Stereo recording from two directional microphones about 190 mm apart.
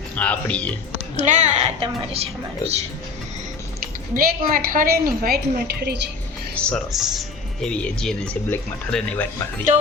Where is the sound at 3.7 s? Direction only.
50° right (ahead or behind).